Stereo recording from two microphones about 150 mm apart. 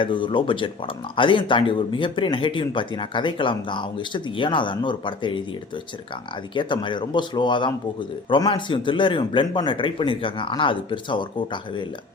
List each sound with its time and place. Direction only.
0.0 s a man's voice: 35° left (ahead or behind)
6.5 s a man's voice: 30° left (ahead or behind)